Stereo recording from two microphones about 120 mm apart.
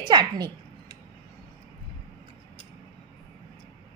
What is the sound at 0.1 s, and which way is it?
Speech, 35° right (ahead or behind).